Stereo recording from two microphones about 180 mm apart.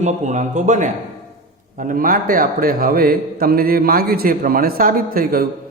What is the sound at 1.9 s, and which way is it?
A man's voice, 50° right (ahead or behind).